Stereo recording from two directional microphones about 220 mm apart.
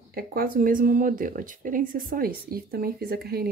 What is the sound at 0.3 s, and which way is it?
Speech, 40° right (ahead or behind).